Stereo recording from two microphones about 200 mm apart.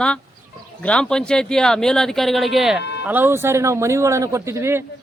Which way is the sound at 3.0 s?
10° right (ahead or behind).